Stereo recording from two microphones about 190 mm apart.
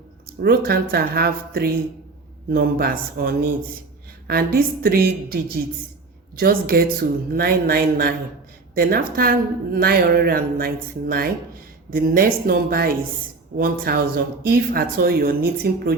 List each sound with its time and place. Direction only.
0.3 s a woman's voice: 55° right (ahead or behind)